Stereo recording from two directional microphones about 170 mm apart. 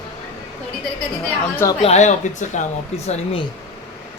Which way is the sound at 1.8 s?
40° left (ahead or behind).